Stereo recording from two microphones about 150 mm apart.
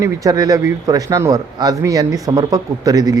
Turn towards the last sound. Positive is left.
turn(degrees=-25)  # may be behind; listen again after turning